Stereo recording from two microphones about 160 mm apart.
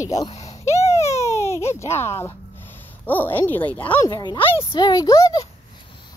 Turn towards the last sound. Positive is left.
turn(degrees=20)  # may be behind; listen again after turning